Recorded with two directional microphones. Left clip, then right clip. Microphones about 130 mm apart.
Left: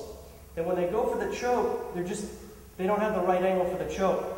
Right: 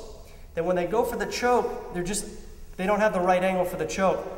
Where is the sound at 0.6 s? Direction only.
35° right (ahead or behind).